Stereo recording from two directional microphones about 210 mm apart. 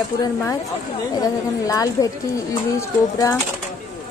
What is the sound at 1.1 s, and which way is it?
A woman's voice, 15° left (ahead or behind).